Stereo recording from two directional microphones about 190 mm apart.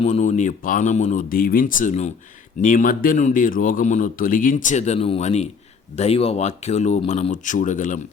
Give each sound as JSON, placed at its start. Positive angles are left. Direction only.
{"t": 0.0, "sound": "speech", "side_deg": 40}